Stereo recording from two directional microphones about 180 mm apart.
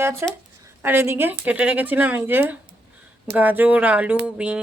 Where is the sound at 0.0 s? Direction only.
15° right (ahead or behind).